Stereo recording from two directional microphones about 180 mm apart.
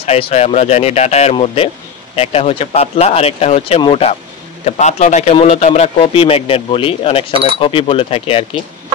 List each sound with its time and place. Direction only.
0.0 s speech: 35° left (ahead or behind)